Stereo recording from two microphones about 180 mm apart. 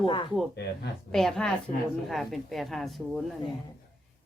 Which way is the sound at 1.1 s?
5° left (ahead or behind).